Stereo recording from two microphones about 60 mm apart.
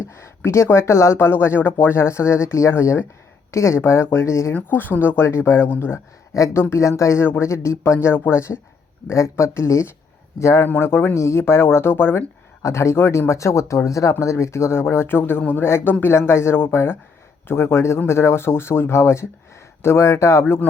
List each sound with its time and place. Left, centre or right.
0.0 s speech: left
4.5 s speech: left
6.3 s speech: left
6.6 s speech: left
7.9 s speech: left
10.7 s speech: left
12.6 s speech: left